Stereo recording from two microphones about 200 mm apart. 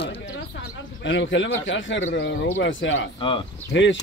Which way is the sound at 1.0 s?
65° left (ahead or behind).